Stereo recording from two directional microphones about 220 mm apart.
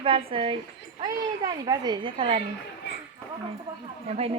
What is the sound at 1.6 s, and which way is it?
Speech, 20° right (ahead or behind).